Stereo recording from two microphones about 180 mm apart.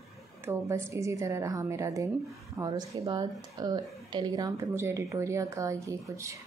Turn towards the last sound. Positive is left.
turn(degrees=-15)  # may be behind; listen again after turning